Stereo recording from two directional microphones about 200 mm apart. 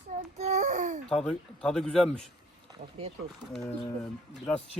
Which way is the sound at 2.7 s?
30° right (ahead or behind).